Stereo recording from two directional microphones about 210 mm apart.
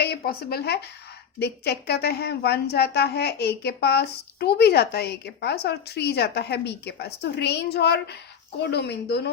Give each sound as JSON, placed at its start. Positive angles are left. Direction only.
{"t": 0.0, "sound": "a woman's voice", "side_deg": 50}